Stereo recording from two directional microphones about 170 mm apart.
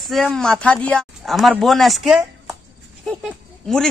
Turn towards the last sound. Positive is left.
turn(degrees=0)  # may be behind; listen again after turning